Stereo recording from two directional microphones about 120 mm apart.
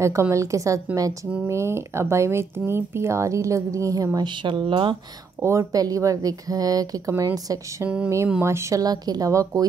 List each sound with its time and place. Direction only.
0.0 s speech: 25° right (ahead or behind)
4.4 s speech: 45° right (ahead or behind)
5.4 s speech: 25° right (ahead or behind)